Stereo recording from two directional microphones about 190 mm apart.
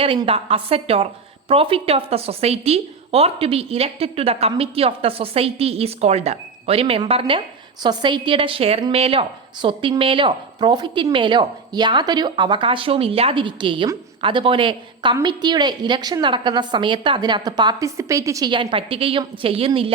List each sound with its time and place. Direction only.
0.0 s a woman's voice: 30° right (ahead or behind)